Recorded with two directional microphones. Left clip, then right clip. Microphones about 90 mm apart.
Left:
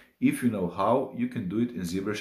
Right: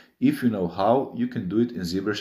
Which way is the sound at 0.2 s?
20° right (ahead or behind).